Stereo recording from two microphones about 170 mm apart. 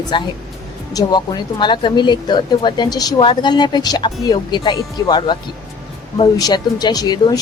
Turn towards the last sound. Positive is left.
turn(degrees=25)  # may be behind; listen again after turning